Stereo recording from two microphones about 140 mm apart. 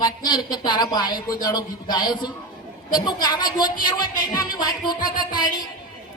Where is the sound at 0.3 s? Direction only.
30° left (ahead or behind).